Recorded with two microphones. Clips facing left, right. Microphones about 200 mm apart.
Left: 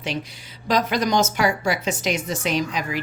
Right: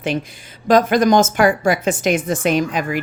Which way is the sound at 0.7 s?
50° right (ahead or behind).